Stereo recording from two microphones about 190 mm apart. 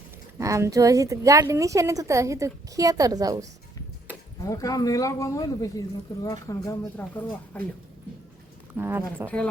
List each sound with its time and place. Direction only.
0.3 s a woman's voice: 15° right (ahead or behind)
4.4 s speech: 15° left (ahead or behind)
8.7 s a woman's voice: 10° right (ahead or behind)
9.2 s speech: 5° left (ahead or behind)